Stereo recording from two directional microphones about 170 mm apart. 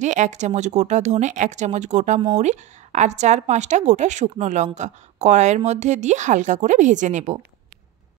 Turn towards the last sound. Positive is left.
turn(degrees=-45)  # may be behind; listen again after turning